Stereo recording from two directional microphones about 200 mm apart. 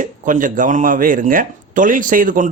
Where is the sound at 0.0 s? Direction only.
40° right (ahead or behind).